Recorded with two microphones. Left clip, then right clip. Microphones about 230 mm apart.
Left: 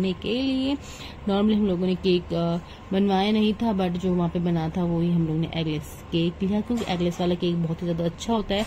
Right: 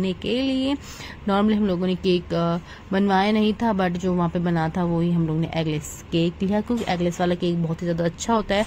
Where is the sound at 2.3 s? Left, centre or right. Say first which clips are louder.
Right 3 dB; right.